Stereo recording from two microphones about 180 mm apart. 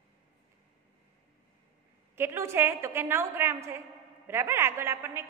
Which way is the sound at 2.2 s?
15° right (ahead or behind).